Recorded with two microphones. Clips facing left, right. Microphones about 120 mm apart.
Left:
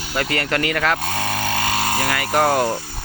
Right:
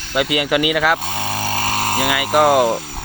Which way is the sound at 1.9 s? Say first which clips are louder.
Right 5 dB; 10° right (ahead or behind).